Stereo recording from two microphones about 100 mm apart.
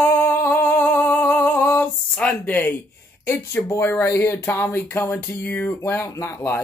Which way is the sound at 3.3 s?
30° left (ahead or behind).